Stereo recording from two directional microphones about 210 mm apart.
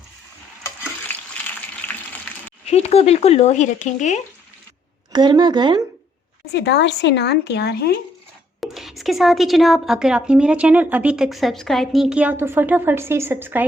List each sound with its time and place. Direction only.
2.6 s speech: 30° left (ahead or behind)
5.1 s speech: 20° right (ahead or behind)
6.5 s a woman's voice: 55° left (ahead or behind)
8.6 s a woman's voice: centre (ahead or behind)